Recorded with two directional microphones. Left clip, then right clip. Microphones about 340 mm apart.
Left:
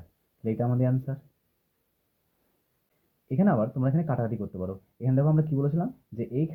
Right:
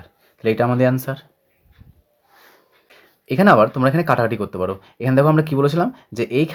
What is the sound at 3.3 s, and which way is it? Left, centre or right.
Speech, right.